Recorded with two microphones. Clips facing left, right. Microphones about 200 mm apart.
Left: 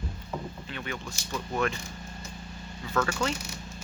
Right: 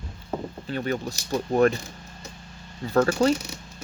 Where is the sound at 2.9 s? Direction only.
35° right (ahead or behind).